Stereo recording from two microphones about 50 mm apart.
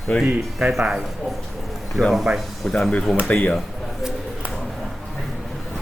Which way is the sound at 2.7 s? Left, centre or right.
Centre.